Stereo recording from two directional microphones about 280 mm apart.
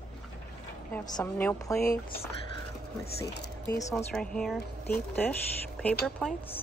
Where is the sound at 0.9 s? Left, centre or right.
Centre.